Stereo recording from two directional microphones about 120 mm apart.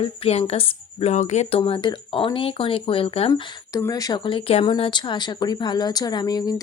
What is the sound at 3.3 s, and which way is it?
A woman's voice, 30° left (ahead or behind).